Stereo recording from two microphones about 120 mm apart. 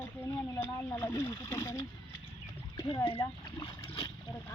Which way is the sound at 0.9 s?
15° left (ahead or behind).